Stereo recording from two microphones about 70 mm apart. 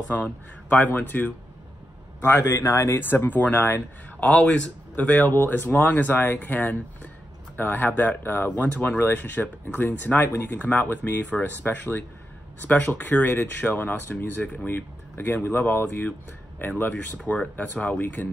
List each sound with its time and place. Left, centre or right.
0.1 s speech: left
2.2 s speech: left
3.0 s speech: left